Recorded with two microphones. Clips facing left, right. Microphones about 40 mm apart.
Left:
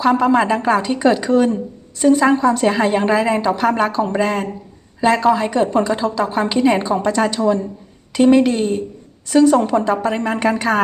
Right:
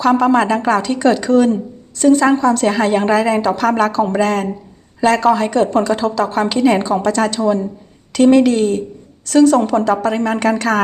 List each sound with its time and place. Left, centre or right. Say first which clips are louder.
0.0 s a woman's voice: right 2 dB; centre
7.3 s a woman's voice: right 1 dB; centre
8.1 s a woman's voice: right 2 dB; centre